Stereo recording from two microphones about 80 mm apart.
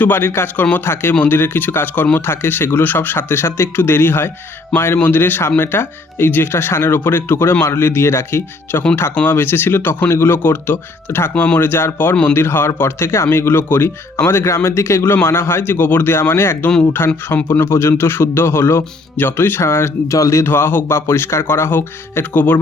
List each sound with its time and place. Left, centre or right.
0.0 s speech: left